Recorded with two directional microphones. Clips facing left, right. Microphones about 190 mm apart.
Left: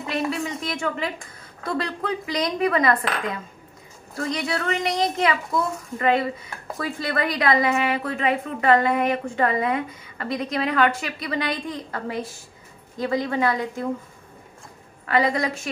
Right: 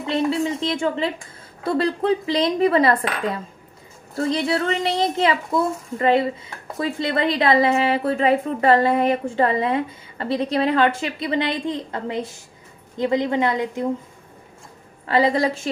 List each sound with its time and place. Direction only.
0.0 s a woman's voice: 25° right (ahead or behind)
15.0 s a woman's voice: 30° right (ahead or behind)